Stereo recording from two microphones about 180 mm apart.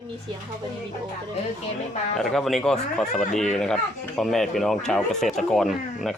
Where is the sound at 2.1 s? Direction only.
Centre (ahead or behind).